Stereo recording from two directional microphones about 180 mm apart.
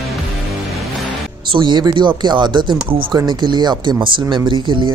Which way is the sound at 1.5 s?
25° right (ahead or behind).